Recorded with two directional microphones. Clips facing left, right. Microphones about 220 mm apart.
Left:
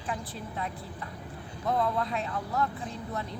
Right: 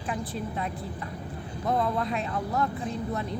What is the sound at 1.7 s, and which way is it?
Speech, 15° right (ahead or behind).